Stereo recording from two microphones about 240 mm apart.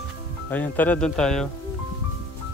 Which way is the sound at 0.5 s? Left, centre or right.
Centre.